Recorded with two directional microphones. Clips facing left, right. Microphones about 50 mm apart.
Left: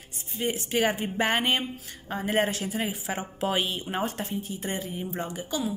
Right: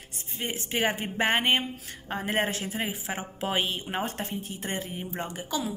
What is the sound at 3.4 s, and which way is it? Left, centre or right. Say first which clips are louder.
Speech: left 1 dB; right.